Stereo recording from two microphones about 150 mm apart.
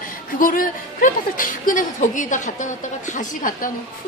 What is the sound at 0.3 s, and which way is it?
A woman's voice, 65° left (ahead or behind).